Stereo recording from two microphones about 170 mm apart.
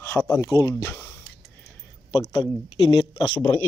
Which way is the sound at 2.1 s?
20° left (ahead or behind).